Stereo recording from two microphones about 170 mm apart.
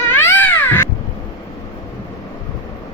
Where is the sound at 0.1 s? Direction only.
15° left (ahead or behind).